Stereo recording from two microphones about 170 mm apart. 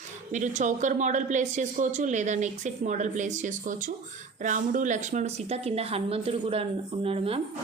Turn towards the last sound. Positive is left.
turn(degrees=-35)  # may be behind; listen again after turning